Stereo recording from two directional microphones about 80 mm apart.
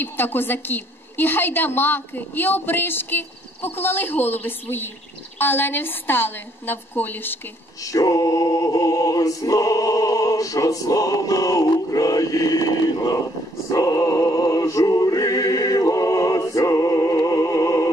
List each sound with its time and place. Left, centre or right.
0.0 s a woman's voice: left
7.8 s male singing: left
13.7 s music: left